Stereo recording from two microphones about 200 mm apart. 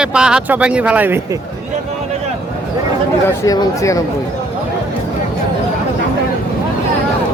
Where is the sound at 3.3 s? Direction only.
15° left (ahead or behind).